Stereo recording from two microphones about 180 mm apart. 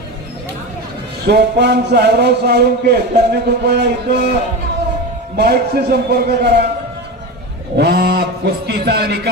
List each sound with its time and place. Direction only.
1.3 s a man's voice: 70° right (ahead or behind)
5.4 s speech: 65° right (ahead or behind)
7.8 s speech: 60° right (ahead or behind)